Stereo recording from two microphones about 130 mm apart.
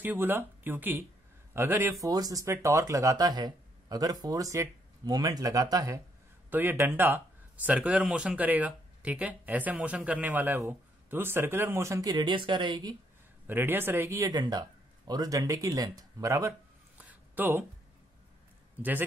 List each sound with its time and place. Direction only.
0.0 s speech: 15° right (ahead or behind)
6.5 s speech: 15° right (ahead or behind); by 12.9 s 35° right (ahead or behind)
13.5 s speech: 15° right (ahead or behind)
17.0 s a sound: 15° right (ahead or behind)
18.8 s speech: 15° right (ahead or behind)